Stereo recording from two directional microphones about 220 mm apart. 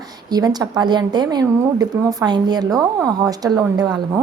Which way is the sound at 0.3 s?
20° right (ahead or behind).